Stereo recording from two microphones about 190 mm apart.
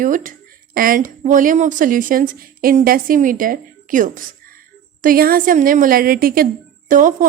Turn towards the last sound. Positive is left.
turn(degrees=-45)  # may be behind; listen again after turning